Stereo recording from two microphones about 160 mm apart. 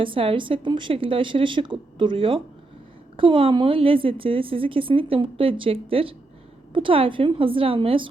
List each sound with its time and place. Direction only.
0.0 s a woman's voice: 35° right (ahead or behind)